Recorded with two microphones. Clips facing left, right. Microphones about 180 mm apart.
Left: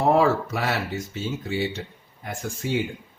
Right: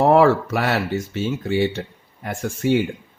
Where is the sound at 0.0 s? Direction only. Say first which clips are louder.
Right 5 dB; 70° right (ahead or behind).